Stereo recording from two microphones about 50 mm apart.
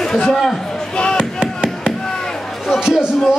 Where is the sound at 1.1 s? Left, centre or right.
Centre.